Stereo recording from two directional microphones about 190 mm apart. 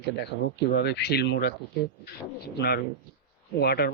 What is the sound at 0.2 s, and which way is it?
Speech, 60° left (ahead or behind).